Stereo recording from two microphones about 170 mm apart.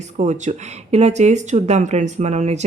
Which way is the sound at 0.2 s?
45° right (ahead or behind).